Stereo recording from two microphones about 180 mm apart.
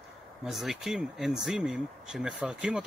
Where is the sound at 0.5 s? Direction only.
Centre (ahead or behind).